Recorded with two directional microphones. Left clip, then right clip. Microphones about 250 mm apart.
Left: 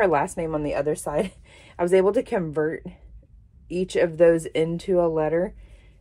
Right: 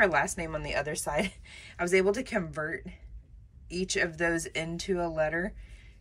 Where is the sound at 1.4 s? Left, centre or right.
Centre.